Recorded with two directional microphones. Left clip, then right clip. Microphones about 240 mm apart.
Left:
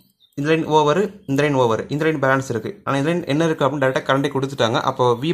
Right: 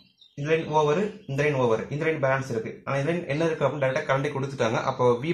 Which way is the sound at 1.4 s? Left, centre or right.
Left.